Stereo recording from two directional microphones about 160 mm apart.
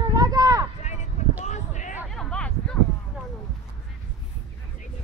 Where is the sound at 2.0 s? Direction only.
5° left (ahead or behind).